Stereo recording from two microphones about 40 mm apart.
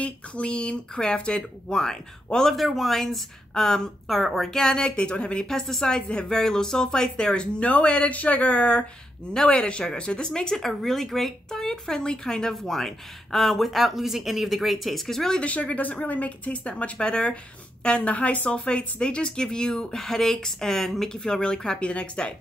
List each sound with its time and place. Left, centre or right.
0.0 s speech: left
2.5 s speech: centre
4.1 s speech: centre
4.5 s speech: centre
5.4 s speech: centre
5.9 s speech: left
10.5 s speech: centre
15.4 s speech: left
18.5 s speech: left; by 21.2 s centre
21.2 s speech: left